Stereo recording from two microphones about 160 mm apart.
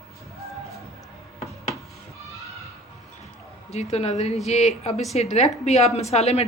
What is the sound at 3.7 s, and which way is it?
A woman's voice, 40° left (ahead or behind).